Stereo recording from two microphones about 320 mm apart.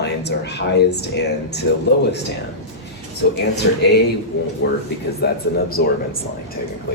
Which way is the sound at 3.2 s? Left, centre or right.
Left.